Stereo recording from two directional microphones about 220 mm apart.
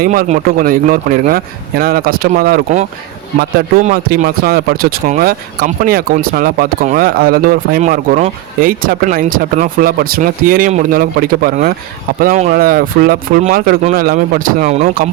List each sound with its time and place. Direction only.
0.0 s speech: 40° right (ahead or behind)
3.8 s speech: 40° right (ahead or behind)